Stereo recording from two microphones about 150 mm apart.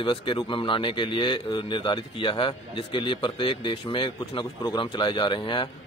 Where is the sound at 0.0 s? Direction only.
35° left (ahead or behind).